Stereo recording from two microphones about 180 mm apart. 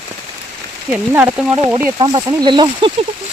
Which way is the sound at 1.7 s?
20° right (ahead or behind).